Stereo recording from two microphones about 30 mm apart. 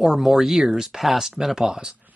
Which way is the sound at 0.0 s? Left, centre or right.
Centre.